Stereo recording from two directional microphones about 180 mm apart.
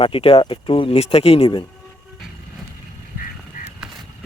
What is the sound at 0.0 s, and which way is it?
Speech, 30° left (ahead or behind).